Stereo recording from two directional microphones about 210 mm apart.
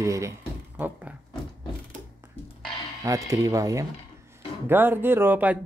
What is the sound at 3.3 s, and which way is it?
Speech, 15° right (ahead or behind).